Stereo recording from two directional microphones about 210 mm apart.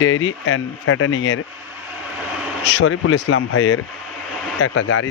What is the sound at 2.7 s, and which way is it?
Speech, 65° left (ahead or behind).